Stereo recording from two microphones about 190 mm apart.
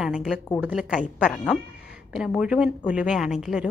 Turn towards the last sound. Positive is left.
turn(degrees=-5)  # may be behind; listen again after turning